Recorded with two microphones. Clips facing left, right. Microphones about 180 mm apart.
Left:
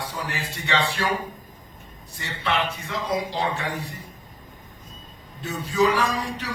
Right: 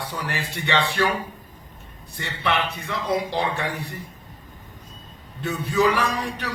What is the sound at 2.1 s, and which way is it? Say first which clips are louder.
A man's voice: right 1 dB; 60° right (ahead or behind).